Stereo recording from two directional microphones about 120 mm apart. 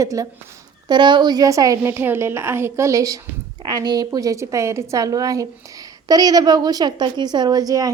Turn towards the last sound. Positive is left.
turn(degrees=-30)  # may be behind; listen again after turning